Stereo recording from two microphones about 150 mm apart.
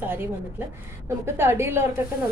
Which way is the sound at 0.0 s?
15° right (ahead or behind).